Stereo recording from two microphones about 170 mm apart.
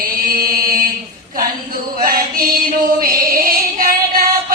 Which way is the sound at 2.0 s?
55° right (ahead or behind).